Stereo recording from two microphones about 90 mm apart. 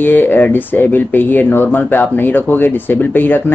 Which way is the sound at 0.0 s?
20° left (ahead or behind).